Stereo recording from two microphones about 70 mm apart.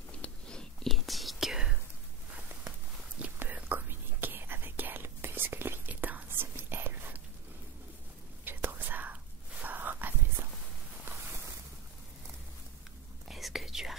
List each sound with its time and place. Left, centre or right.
0.2 s whispering: centre
0.8 s whispering: centre
3.2 s whispering: right
8.5 s whispering: right
10.4 s walk: right
13.3 s whispering: centre